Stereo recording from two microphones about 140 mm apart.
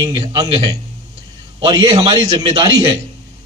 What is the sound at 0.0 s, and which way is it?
A man's voice, 30° right (ahead or behind).